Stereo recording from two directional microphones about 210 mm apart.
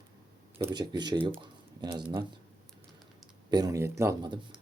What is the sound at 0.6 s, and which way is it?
Speech, 20° right (ahead or behind).